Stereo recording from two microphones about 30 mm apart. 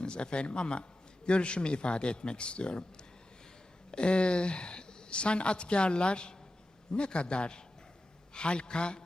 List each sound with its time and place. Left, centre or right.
0.0 s a man's voice: left